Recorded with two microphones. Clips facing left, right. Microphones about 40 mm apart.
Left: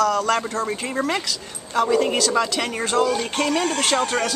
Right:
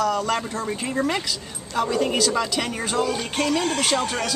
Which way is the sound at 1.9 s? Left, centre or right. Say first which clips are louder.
Left 4 dB; centre.